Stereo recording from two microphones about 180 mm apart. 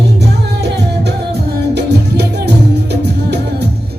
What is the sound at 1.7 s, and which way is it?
Music, 65° right (ahead or behind).